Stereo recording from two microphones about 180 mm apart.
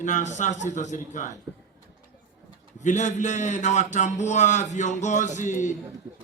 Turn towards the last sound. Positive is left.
turn(degrees=45)  # may be behind; listen again after turning